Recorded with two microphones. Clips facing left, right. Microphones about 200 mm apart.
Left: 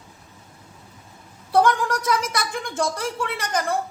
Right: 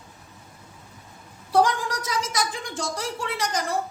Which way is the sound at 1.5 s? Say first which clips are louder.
Left 2 dB; 55° left (ahead or behind).